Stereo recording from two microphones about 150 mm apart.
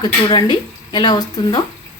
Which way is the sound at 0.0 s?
30° left (ahead or behind).